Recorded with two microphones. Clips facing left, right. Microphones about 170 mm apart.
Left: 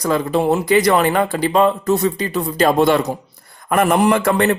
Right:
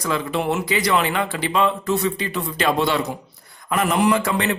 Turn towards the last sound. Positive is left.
turn(degrees=50)  # may be behind; listen again after turning